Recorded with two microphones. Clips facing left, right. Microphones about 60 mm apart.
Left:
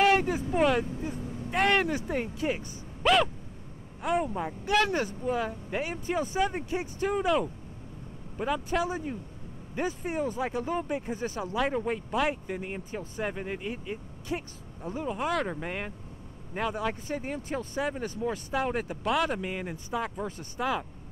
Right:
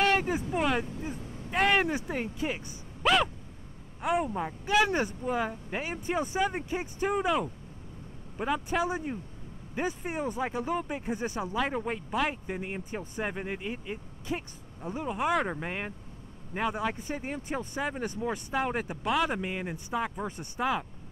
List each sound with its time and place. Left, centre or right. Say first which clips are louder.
0.2 s speech: left 3 dB; centre
4.8 s speech: even; centre
10.1 s speech: left 2 dB; centre
12.5 s speech: even; centre
18.7 s speech: left 1 dB; centre
19.0 s speech: even; centre